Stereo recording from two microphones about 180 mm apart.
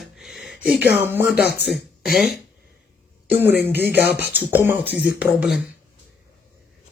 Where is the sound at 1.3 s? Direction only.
65° left (ahead or behind).